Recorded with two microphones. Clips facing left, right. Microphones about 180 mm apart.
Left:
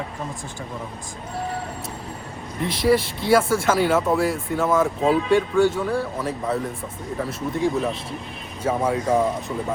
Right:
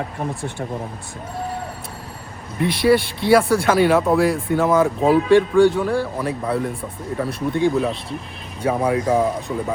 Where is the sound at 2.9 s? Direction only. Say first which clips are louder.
Right 2 dB; 65° right (ahead or behind).